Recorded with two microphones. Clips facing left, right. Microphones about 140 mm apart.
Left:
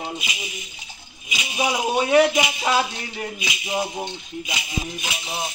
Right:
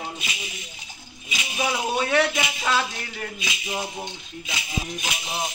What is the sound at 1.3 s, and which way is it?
Speech, 15° left (ahead or behind).